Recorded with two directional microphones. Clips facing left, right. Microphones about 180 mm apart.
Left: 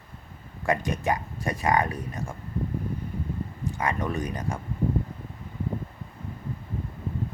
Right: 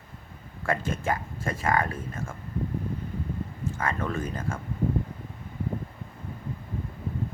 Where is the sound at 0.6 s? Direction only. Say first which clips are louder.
Left 2 dB; 15° left (ahead or behind).